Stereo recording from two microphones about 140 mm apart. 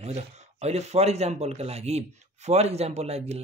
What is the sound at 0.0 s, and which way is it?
A man's voice, 50° right (ahead or behind).